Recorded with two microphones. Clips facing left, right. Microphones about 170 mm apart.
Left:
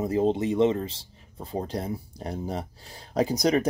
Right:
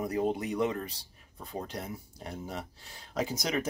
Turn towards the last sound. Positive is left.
turn(degrees=35)  # may be behind; listen again after turning